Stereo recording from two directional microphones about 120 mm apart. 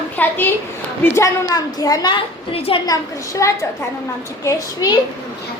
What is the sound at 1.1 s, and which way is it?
A woman's voice, 30° left (ahead or behind).